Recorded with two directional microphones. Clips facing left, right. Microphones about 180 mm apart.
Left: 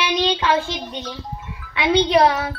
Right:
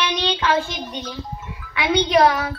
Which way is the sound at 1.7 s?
25° left (ahead or behind).